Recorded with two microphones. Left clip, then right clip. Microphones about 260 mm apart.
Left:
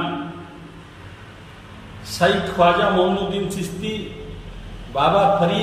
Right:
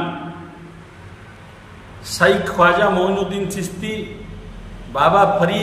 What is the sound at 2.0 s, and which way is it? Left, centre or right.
Speech, centre.